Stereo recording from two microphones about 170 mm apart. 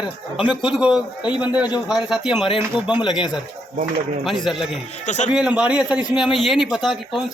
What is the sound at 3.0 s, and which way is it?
Speech, 25° left (ahead or behind).